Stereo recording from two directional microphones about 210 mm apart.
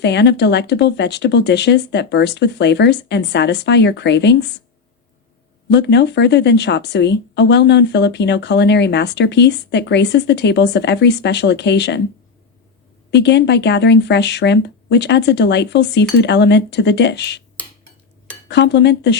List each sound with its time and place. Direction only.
0.0 s speech: 55° left (ahead or behind)
5.6 s speech: 55° left (ahead or behind)
13.1 s speech: 55° left (ahead or behind)
18.4 s speech: 55° left (ahead or behind)